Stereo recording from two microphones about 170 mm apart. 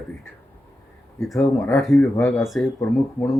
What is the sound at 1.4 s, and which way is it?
Speech, 10° left (ahead or behind).